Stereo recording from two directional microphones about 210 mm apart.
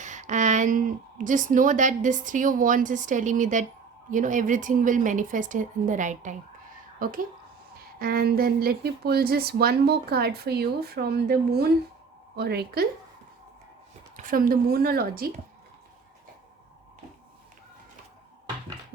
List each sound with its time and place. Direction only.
0.0 s speech: 35° right (ahead or behind)
14.2 s speech: 40° right (ahead or behind)